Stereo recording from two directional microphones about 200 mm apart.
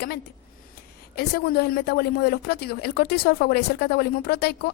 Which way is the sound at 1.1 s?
50° left (ahead or behind).